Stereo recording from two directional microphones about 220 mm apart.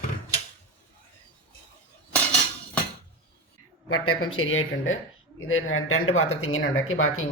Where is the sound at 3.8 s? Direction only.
80° left.